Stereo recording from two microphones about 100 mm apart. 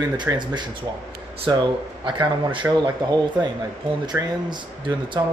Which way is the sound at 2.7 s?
5° right (ahead or behind).